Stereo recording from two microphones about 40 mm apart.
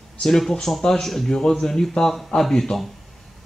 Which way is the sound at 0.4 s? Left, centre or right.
Centre.